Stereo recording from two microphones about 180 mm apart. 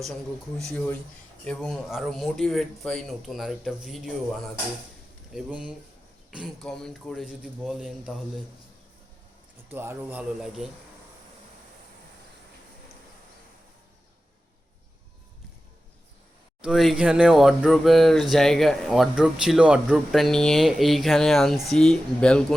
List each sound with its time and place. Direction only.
0.6 s speech: 5° left (ahead or behind)
5.3 s speech: 5° right (ahead or behind)
9.6 s a man's voice: 10° right (ahead or behind)
16.6 s speech: 5° right (ahead or behind)